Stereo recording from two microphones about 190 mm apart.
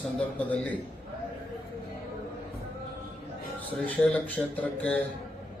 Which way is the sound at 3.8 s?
10° left (ahead or behind).